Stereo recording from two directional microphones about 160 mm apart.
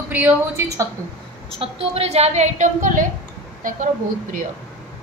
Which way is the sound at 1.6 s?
35° right (ahead or behind).